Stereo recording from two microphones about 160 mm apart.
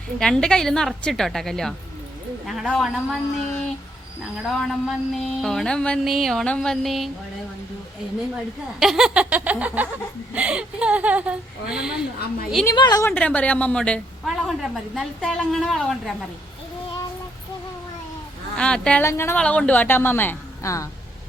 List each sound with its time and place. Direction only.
0.2 s a sound: 5° left (ahead or behind)
8.8 s speech: centre (ahead or behind)
12.6 s a woman's voice: 25° left (ahead or behind)
13.1 s a woman's voice: 10° left (ahead or behind)
14.6 s a sound: centre (ahead or behind)
18.5 s a woman's voice: 5° left (ahead or behind)